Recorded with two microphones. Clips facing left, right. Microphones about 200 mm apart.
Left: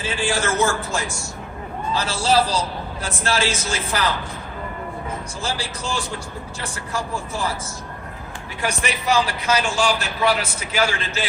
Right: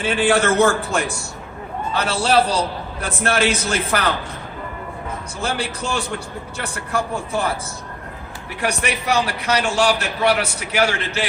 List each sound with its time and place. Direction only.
0.0 s a man's voice: 60° right (ahead or behind)
5.4 s a man's voice: 60° right (ahead or behind)
8.6 s a man's voice: 65° right (ahead or behind)